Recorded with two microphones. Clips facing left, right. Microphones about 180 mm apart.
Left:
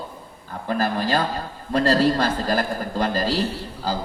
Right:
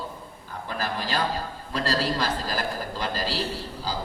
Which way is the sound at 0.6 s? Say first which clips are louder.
Left 8 dB; 50° left (ahead or behind).